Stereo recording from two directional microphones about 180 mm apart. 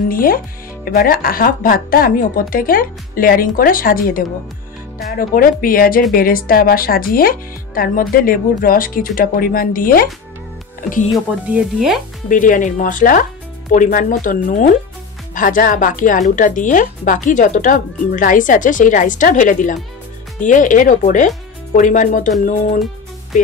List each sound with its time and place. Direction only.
0.1 s speech: 50° left (ahead or behind)
11.5 s speech: centre (ahead or behind)
12.3 s speech: 45° left (ahead or behind)